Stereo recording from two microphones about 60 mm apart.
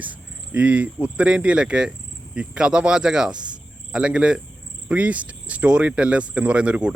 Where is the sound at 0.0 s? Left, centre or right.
Right.